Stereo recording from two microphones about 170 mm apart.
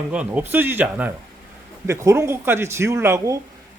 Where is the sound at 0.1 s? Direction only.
10° right (ahead or behind).